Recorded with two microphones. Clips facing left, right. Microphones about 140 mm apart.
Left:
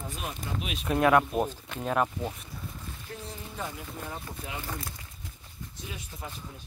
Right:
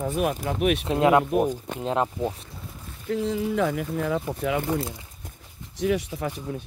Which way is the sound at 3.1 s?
90° right.